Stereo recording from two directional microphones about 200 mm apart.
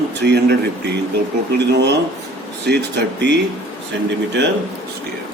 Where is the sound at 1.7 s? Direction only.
60° right (ahead or behind).